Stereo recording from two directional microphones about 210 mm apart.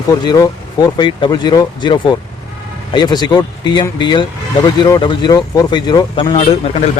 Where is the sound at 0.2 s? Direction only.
20° left (ahead or behind).